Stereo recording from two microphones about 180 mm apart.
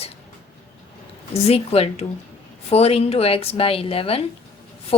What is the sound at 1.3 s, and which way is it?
A woman's voice, 35° left (ahead or behind).